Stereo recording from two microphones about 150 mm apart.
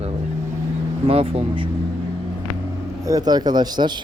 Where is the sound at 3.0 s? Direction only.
25° right (ahead or behind).